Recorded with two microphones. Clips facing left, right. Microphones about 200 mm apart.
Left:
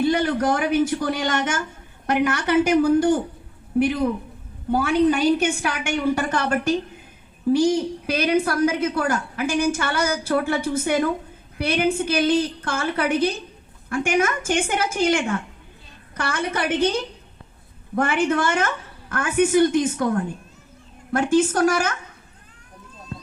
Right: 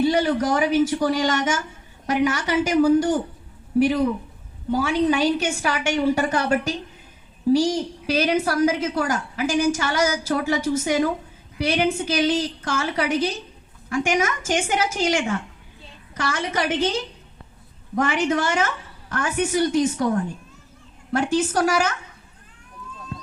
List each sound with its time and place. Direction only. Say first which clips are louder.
0.0 s a woman's voice: even; 50° left (ahead or behind)
4.7 s a woman's voice: left 2 dB; 55° left (ahead or behind)